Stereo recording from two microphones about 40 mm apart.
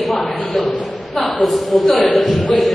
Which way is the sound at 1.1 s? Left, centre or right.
Centre.